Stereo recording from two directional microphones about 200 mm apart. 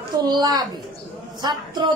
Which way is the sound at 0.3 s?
20° right (ahead or behind).